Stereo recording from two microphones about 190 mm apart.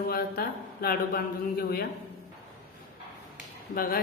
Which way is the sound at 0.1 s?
50° left (ahead or behind).